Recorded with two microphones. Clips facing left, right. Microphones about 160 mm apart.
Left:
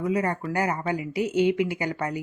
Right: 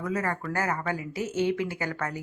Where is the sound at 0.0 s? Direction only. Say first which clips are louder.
Left 4 dB; 15° left (ahead or behind).